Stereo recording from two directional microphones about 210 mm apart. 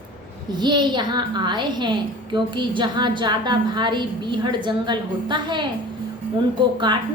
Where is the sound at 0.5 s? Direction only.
20° right (ahead or behind).